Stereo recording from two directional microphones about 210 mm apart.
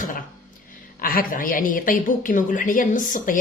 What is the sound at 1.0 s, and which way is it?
A woman's voice, 40° left (ahead or behind).